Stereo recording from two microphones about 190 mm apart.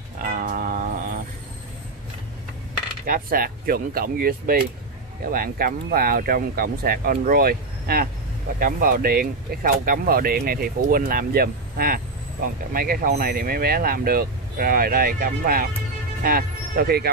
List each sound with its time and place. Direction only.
0.2 s music: 50° right (ahead or behind)
3.1 s speech: 50° right (ahead or behind)